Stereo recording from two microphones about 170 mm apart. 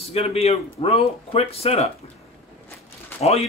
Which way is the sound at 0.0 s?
35° left (ahead or behind).